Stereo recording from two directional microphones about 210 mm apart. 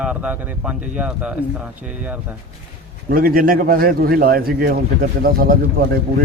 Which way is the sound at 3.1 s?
45° right (ahead or behind).